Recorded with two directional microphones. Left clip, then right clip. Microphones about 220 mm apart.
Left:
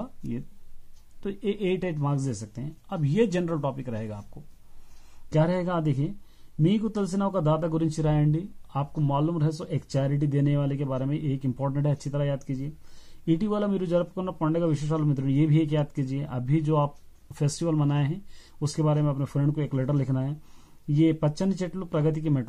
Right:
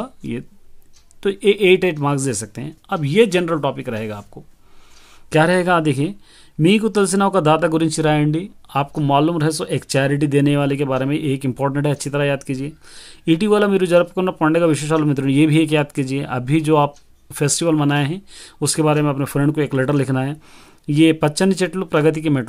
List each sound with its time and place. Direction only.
1.2 s speech: 30° right (ahead or behind)
5.3 s speech: 30° right (ahead or behind)